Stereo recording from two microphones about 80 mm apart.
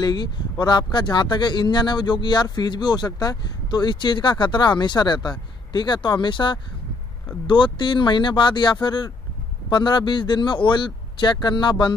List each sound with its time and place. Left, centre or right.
0.0 s a man's voice: left